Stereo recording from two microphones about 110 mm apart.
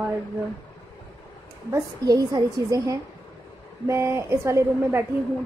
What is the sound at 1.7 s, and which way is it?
A woman's voice, 35° right (ahead or behind).